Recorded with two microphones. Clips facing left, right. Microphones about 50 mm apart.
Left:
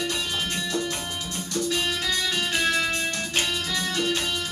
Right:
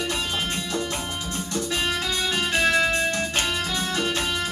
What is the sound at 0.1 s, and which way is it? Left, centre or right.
Music, right.